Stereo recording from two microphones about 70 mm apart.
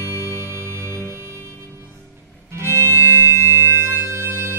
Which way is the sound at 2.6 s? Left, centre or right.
Right.